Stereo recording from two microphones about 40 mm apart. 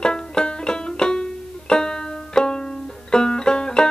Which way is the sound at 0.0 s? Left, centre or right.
Left.